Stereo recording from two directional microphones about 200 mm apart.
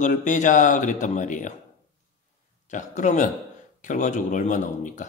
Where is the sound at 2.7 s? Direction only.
40° left (ahead or behind).